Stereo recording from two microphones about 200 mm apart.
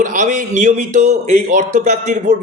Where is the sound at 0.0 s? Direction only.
40° right (ahead or behind).